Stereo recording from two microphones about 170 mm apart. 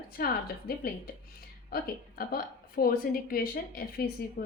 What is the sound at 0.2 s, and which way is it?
A woman's voice, 60° left (ahead or behind).